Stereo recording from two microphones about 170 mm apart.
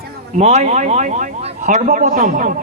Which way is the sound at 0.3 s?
40° right (ahead or behind).